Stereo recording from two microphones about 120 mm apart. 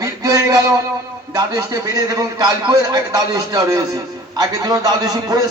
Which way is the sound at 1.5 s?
30° right (ahead or behind).